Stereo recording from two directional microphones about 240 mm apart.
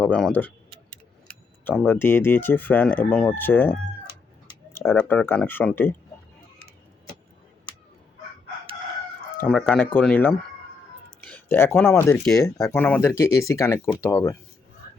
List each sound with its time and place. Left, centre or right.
0.0 s speech: centre
1.6 s speech: centre
9.4 s speech: centre